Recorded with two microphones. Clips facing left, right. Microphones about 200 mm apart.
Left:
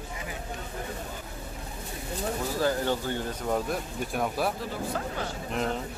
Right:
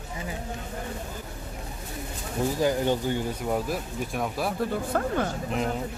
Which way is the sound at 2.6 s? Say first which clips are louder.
Right 2 dB; 15° right (ahead or behind).